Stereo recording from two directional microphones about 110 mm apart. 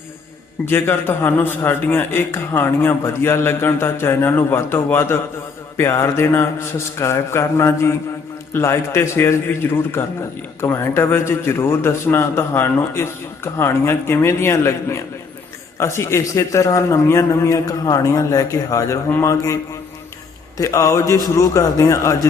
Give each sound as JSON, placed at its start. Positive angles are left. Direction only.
{"t": 0.6, "sound": "a man's voice", "side_deg": 20}
{"t": 20.6, "sound": "a man's voice", "side_deg": 30}